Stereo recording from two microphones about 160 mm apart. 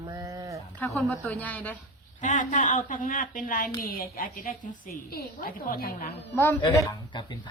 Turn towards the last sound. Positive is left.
turn(degrees=30)  # may be behind; listen again after turning